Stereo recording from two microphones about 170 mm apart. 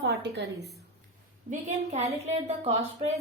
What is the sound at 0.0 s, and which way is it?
Speech, 75° right (ahead or behind).